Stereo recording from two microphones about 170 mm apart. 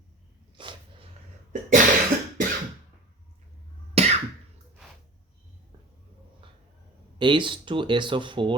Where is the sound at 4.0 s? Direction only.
35° right (ahead or behind).